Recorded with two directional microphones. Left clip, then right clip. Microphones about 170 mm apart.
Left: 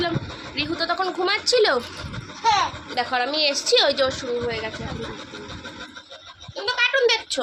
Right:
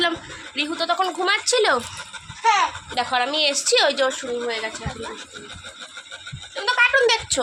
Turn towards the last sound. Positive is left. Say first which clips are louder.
# right 2 dB
turn(degrees=-15)  # may be behind; listen again after turning